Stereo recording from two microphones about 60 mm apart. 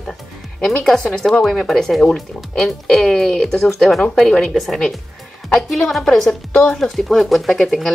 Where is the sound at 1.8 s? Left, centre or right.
Centre.